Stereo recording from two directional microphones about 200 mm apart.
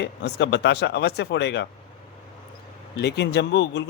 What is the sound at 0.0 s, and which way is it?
Speech, 60° left (ahead or behind).